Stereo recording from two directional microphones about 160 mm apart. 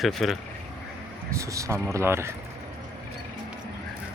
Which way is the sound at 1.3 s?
20° right (ahead or behind).